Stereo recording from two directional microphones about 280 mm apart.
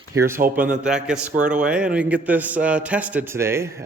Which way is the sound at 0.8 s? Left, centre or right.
Centre.